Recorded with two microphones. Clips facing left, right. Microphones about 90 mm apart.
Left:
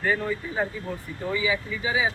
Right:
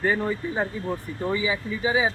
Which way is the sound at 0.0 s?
25° right (ahead or behind).